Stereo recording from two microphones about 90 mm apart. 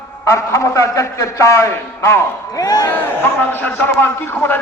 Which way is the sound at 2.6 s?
45° left (ahead or behind).